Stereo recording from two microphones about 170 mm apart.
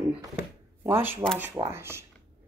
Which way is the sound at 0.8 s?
15° right (ahead or behind).